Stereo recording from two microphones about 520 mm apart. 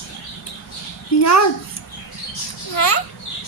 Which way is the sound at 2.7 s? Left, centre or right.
Left.